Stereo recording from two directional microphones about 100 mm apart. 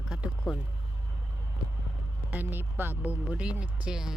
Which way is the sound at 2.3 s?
20° right (ahead or behind).